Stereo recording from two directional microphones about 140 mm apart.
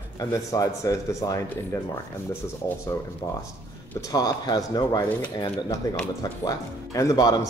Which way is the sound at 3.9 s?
25° left (ahead or behind).